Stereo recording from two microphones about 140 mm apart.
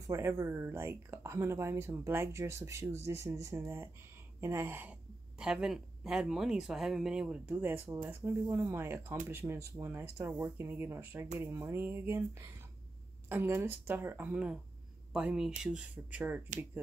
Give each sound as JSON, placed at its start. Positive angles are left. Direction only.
{"t": 0.0, "sound": "speech", "side_deg": -20}